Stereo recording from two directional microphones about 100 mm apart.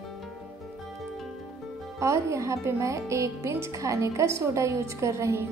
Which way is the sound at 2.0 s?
30° right (ahead or behind).